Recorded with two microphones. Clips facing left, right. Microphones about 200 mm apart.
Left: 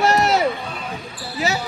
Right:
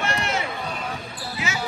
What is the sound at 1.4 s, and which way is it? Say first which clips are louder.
Basketball bounce: left 9 dB; 35° left (ahead or behind).